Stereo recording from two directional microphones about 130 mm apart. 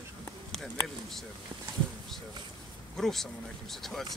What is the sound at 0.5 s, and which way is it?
Speech, centre (ahead or behind).